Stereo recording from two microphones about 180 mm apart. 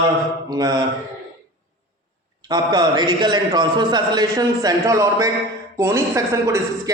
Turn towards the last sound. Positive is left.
turn(degrees=-15)  # may be behind; listen again after turning